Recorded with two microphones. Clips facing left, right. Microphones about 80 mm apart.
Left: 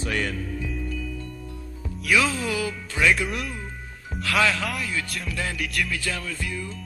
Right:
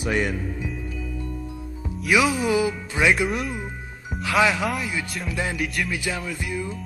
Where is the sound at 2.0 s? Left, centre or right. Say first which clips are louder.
Right 3 dB; centre.